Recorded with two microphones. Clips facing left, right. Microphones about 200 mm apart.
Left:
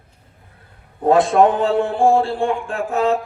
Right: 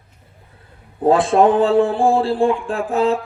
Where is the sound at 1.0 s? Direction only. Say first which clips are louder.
Even; 30° right (ahead or behind).